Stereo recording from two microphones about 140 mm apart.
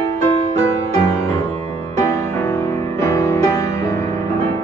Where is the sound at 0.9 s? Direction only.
25° left (ahead or behind).